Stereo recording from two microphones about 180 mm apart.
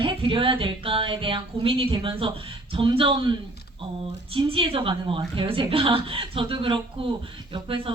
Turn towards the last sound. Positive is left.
turn(degrees=-30)  # may be behind; listen again after turning